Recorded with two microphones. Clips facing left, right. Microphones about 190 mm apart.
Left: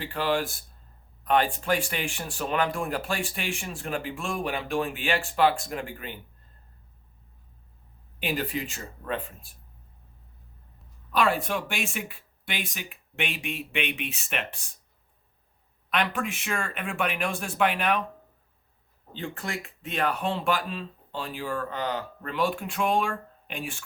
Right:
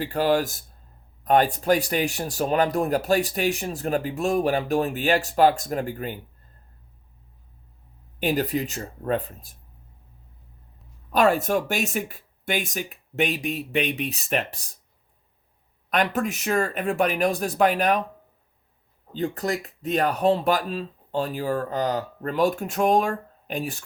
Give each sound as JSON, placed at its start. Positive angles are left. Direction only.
{"t": 0.0, "sound": "speech", "side_deg": -40}
{"t": 8.2, "sound": "speech", "side_deg": -40}
{"t": 11.1, "sound": "speech", "side_deg": -45}
{"t": 15.9, "sound": "speech", "side_deg": -40}
{"t": 19.1, "sound": "speech", "side_deg": -40}